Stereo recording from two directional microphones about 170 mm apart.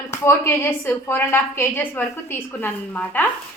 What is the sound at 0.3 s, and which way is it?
A woman's voice, 15° left (ahead or behind).